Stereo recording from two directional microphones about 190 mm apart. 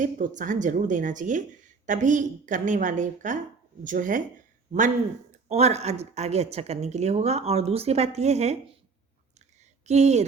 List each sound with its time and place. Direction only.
0.0 s speech: 40° right (ahead or behind)
5.5 s speech: 35° right (ahead or behind)
9.8 s speech: 35° right (ahead or behind)